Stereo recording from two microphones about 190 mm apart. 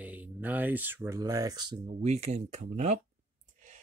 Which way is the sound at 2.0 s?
35° right (ahead or behind).